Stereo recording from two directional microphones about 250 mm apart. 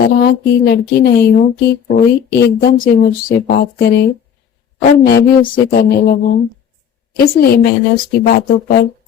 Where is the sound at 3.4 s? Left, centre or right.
Left.